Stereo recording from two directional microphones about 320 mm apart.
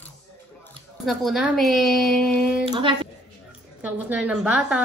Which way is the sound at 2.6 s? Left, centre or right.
Centre.